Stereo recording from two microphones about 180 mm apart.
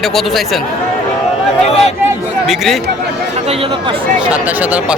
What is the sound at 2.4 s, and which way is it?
Speech, centre (ahead or behind).